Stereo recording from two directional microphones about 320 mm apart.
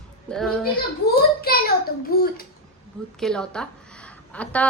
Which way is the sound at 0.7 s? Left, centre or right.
Left.